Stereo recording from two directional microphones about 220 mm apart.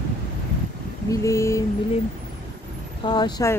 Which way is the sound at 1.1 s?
15° left (ahead or behind).